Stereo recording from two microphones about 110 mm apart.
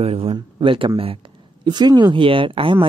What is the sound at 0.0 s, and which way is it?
Speech, 60° right (ahead or behind).